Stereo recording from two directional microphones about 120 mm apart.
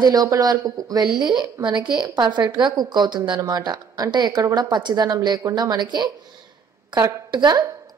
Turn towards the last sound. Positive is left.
turn(degrees=-35)  # may be behind; listen again after turning